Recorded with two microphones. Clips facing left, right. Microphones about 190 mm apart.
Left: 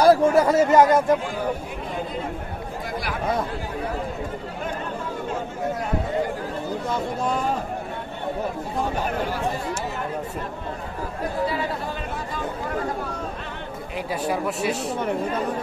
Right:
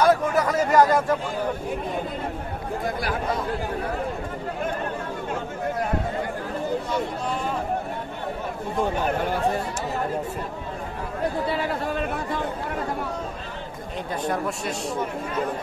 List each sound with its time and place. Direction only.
0.0 s speech: 30° left (ahead or behind)
14.2 s speech: 5° left (ahead or behind)